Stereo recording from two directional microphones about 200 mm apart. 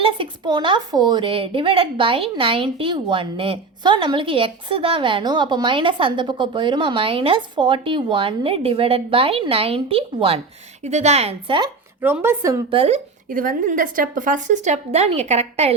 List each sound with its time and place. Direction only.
0.0 s a woman's voice: 25° right (ahead or behind)
12.0 s speech: 10° right (ahead or behind)
12.7 s a woman's voice: 30° right (ahead or behind)
13.3 s a woman's voice: 40° right (ahead or behind)